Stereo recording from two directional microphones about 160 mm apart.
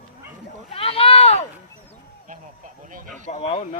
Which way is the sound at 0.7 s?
35° left (ahead or behind).